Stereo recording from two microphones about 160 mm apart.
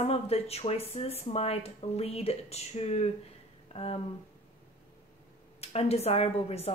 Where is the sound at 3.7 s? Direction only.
35° left (ahead or behind).